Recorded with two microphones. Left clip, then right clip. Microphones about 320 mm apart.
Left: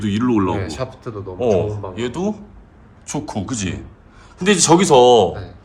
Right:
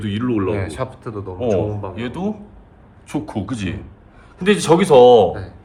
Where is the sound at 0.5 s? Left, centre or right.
Right.